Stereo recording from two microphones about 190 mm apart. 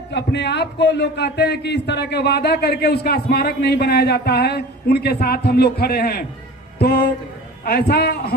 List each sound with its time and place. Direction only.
0.1 s a man's voice: 65° left (ahead or behind)
6.8 s music: 55° left (ahead or behind)
7.6 s a man's voice: 55° left (ahead or behind)